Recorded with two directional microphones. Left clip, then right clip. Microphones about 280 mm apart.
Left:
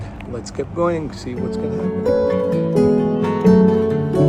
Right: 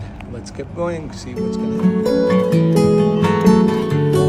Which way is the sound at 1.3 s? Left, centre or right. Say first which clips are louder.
Right 1 dB; centre.